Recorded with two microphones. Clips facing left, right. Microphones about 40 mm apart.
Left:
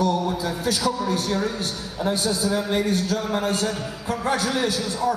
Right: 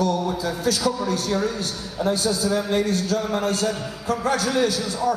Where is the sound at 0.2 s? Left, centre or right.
Centre.